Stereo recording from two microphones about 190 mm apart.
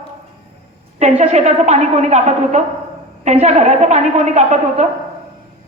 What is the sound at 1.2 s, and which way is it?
A woman's voice, 35° right (ahead or behind).